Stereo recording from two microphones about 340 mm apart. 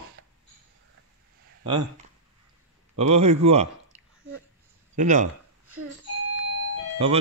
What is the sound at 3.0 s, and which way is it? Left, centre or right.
Speech, centre.